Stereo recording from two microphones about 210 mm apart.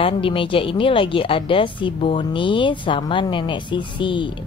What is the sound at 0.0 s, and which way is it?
A woman's voice, 25° left (ahead or behind).